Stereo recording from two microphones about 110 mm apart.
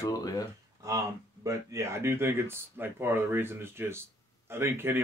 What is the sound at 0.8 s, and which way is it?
Speech, 30° right (ahead or behind).